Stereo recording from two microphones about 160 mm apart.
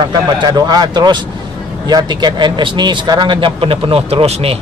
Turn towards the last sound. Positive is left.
turn(degrees=-40)  # may be behind; listen again after turning